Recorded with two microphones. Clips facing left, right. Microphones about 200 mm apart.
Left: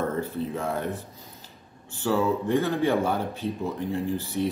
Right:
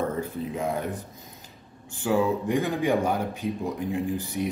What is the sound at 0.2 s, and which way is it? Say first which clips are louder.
Speech: even; 15° right (ahead or behind).